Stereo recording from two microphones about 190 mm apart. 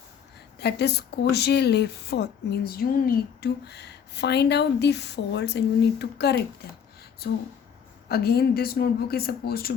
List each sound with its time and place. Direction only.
0.6 s a woman's voice: 60° left (ahead or behind)